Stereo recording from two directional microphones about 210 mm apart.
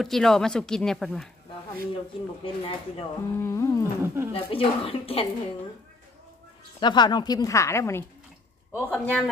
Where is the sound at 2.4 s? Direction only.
25° left (ahead or behind).